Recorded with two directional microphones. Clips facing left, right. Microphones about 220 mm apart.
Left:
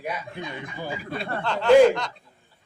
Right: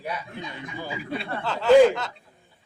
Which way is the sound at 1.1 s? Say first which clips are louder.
Right 1 dB; 45° left (ahead or behind).